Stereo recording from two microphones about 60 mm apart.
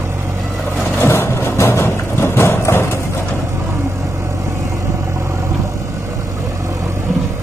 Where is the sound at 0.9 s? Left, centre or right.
Left.